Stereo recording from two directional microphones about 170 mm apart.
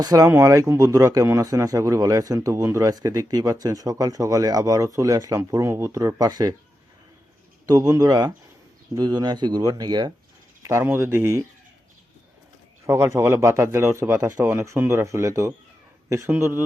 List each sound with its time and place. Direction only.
0.0 s speech: 20° right (ahead or behind)
7.7 s speech: 20° right (ahead or behind)
12.8 s speech: 15° right (ahead or behind)